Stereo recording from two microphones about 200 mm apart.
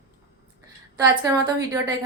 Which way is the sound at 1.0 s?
20° right (ahead or behind).